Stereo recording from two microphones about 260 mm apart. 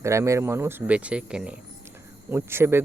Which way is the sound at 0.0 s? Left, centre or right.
Centre.